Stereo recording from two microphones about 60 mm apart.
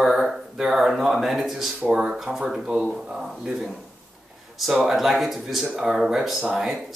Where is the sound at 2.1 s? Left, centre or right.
Centre.